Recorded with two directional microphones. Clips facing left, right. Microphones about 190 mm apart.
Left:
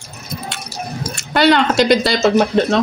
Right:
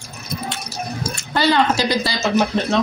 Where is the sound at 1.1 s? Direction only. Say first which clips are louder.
Left 4 dB; 70° left (ahead or behind).